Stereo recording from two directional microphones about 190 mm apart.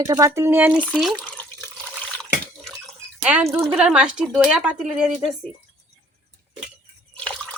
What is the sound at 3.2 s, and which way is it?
Speech, 5° right (ahead or behind).